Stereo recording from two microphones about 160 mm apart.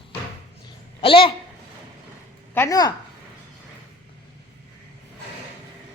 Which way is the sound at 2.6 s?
20° left (ahead or behind).